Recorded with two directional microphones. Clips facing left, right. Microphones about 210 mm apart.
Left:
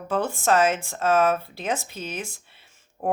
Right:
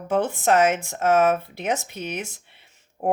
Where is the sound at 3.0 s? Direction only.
25° right (ahead or behind).